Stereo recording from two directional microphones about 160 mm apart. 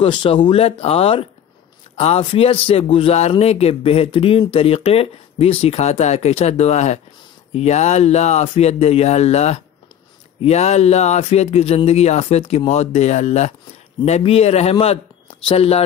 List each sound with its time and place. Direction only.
0.0 s speech: 35° left (ahead or behind)